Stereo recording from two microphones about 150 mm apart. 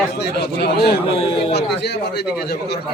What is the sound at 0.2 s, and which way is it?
Speech, 90° left.